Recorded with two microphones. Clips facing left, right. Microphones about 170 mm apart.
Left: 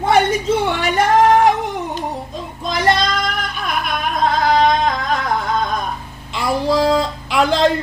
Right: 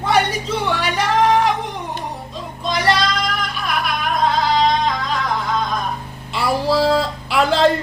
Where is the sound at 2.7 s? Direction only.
50° left (ahead or behind).